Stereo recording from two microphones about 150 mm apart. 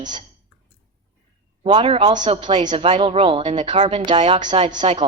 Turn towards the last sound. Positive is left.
turn(degrees=-30)  # may be behind; listen again after turning